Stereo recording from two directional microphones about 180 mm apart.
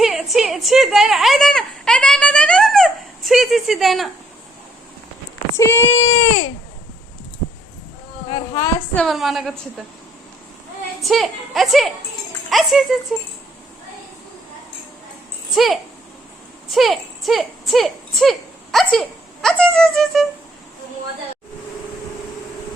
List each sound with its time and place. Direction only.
0.0 s a sound: centre (ahead or behind)
5.5 s speech: 15° left (ahead or behind)
8.3 s speech: 20° left (ahead or behind)
9.0 s a woman's voice: centre (ahead or behind)
11.0 s a woman's voice: centre (ahead or behind)
15.5 s a woman's voice: centre (ahead or behind)